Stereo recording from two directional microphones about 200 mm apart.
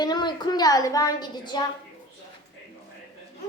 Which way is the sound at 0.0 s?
20° left (ahead or behind).